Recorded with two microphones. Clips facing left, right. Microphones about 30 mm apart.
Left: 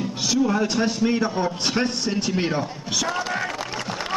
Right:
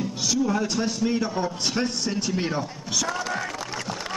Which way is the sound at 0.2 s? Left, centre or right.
Centre.